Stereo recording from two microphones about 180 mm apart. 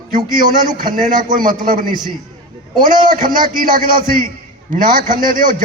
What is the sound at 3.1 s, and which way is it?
A man's voice, 50° right (ahead or behind).